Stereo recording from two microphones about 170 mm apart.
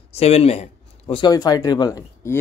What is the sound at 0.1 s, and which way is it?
Speech, 35° left (ahead or behind).